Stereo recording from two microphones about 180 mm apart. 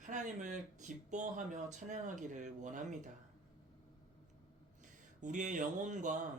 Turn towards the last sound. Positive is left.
turn(degrees=-45)  # may be behind; listen again after turning